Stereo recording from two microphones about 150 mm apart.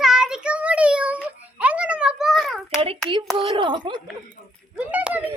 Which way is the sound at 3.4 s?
35° right (ahead or behind).